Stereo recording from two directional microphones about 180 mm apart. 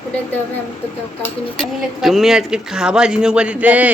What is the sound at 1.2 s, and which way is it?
Speech, centre (ahead or behind).